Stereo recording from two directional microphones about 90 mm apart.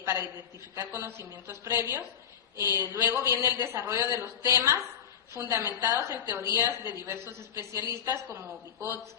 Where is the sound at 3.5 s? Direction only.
20° right (ahead or behind).